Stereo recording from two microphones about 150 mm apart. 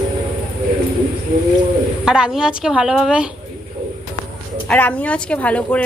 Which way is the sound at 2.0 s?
5° right (ahead or behind).